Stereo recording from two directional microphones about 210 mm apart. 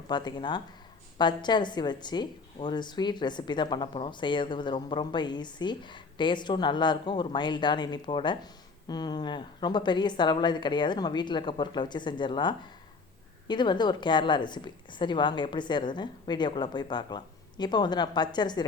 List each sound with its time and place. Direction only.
0.1 s a woman's voice: 20° left (ahead or behind)